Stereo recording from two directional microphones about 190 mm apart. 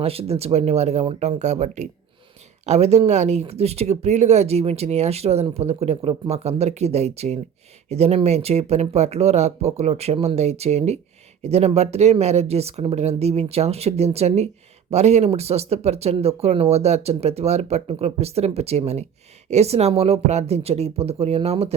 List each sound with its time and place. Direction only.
0.0 s speech: 30° right (ahead or behind)